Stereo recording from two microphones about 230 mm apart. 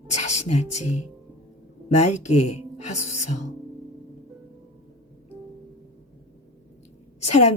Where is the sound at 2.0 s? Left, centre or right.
Left.